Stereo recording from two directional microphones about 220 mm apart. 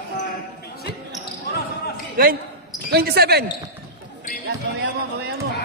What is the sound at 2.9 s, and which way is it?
Speech, 45° right (ahead or behind).